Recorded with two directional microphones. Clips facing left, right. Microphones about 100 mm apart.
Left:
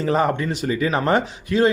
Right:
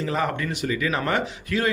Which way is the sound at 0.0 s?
30° left (ahead or behind).